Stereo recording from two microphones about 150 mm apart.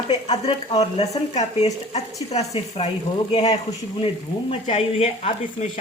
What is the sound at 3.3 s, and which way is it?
A woman's voice, 30° left (ahead or behind).